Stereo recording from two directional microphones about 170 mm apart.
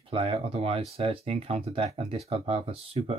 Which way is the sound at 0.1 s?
35° right (ahead or behind).